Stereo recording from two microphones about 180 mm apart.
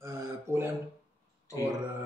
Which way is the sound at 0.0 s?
15° right (ahead or behind).